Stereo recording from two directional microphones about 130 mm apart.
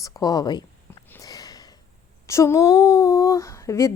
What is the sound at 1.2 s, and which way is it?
Sniff, 30° left (ahead or behind).